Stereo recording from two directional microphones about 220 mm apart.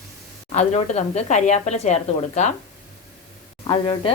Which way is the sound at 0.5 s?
30° left (ahead or behind).